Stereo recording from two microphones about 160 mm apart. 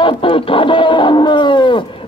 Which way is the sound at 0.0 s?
35° left (ahead or behind).